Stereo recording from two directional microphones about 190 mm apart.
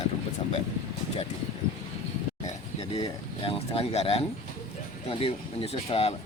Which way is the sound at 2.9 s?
30° left (ahead or behind).